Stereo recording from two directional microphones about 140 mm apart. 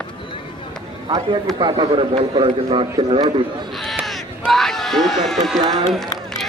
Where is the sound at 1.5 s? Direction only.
35° right (ahead or behind).